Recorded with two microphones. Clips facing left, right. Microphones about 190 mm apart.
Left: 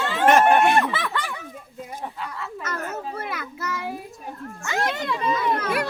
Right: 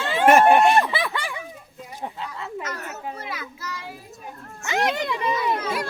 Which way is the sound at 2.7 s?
50° left (ahead or behind).